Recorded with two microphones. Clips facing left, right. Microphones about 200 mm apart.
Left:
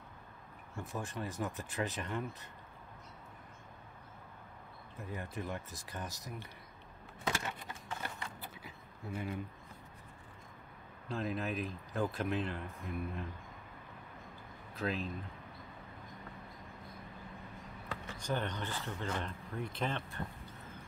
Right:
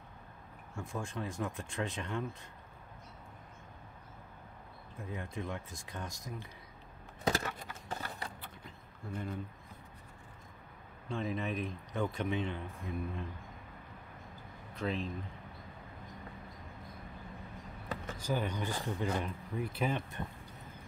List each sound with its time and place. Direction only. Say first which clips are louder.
0.7 s speech: right 1 dB; 5° left (ahead or behind)
4.9 s speech: right 1 dB; centre (ahead or behind)
7.2 s a sound: right 4 dB; 40° right (ahead or behind)
8.4 s a sound: left 1 dB; 5° left (ahead or behind)
11.1 s speech: right 1 dB; centre (ahead or behind)
14.8 s speech: right 1 dB; centre (ahead or behind)
18.1 s speech: right 2 dB; 5° right (ahead or behind)